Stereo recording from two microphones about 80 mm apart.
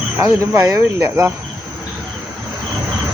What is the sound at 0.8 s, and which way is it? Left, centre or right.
Speech, right.